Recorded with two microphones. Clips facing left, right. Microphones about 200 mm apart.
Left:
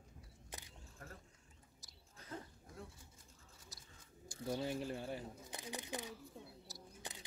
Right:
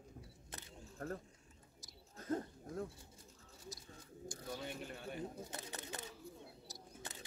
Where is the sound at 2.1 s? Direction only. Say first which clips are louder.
Right 11 dB; 50° right (ahead or behind).